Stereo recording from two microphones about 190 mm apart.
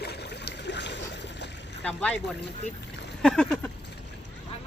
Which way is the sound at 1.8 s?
5° left (ahead or behind).